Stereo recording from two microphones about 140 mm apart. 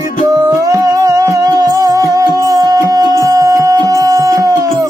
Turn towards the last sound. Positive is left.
turn(degrees=-25)  # may be behind; listen again after turning